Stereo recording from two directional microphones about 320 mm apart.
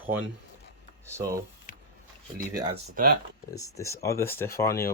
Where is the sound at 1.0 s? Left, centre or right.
Centre.